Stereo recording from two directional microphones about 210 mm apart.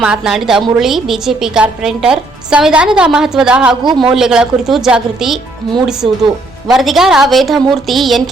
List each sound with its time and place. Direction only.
0.0 s a woman's voice: 5° right (ahead or behind)
3.8 s a man's voice: 20° right (ahead or behind)
4.1 s a woman's voice: centre (ahead or behind)